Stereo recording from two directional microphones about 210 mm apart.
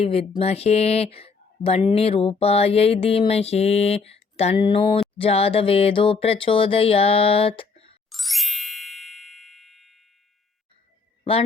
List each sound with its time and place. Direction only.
0.0 s speech: 30° left (ahead or behind)
8.1 s ding: centre (ahead or behind)
11.2 s a sound: 25° left (ahead or behind)